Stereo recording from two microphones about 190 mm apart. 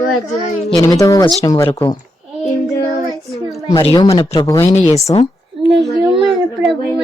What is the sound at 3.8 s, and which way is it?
Speech, 30° left (ahead or behind).